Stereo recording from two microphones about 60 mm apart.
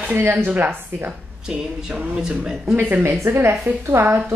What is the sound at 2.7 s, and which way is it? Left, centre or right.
Speech, right.